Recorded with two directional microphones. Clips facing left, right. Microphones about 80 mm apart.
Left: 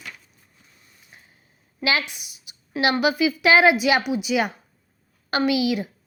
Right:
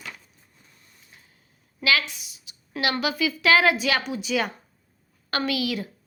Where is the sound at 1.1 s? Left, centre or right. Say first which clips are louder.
Left 4 dB; left.